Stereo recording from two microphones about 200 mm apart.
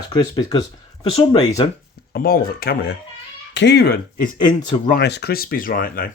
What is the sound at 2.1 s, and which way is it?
Speech, 50° left (ahead or behind).